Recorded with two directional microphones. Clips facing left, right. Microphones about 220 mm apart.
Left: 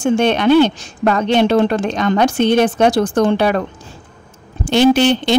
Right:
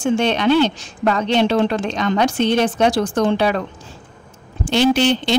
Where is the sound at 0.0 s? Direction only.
50° left (ahead or behind).